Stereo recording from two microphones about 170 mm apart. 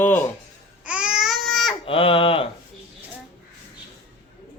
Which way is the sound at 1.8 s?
35° left (ahead or behind).